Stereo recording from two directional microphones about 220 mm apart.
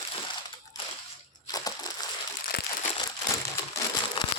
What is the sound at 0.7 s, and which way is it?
Crushing, 15° left (ahead or behind).